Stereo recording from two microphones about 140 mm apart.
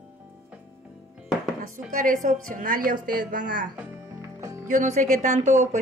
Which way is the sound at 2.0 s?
70° right (ahead or behind).